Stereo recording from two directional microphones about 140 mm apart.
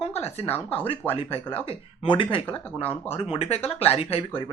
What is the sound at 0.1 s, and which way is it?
Speech, 50° left (ahead or behind).